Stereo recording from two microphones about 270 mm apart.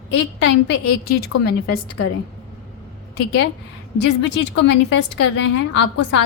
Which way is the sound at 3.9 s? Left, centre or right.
Left.